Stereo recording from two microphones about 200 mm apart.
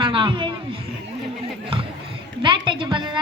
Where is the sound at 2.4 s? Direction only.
25° right (ahead or behind).